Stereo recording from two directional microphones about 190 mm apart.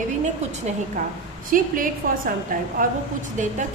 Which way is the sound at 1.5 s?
45° right (ahead or behind).